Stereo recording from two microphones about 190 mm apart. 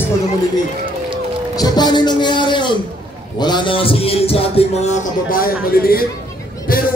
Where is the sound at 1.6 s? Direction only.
20° left (ahead or behind).